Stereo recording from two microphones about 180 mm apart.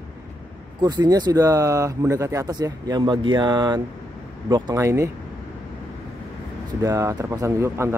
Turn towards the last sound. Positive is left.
turn(degrees=-15)  # may be behind; listen again after turning